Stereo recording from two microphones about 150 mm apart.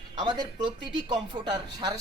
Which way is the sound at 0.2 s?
30° right (ahead or behind).